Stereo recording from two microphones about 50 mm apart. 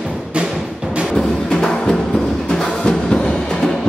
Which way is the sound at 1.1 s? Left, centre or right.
Centre.